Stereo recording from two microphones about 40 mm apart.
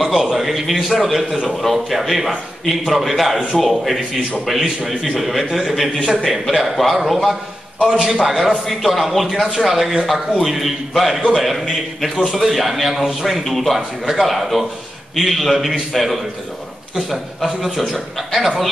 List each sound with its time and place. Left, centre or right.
0.0 s a man's voice: centre
7.8 s a man's voice: centre
8.2 s a man's voice: centre
13.7 s a man's voice: centre
14.2 s a man's voice: centre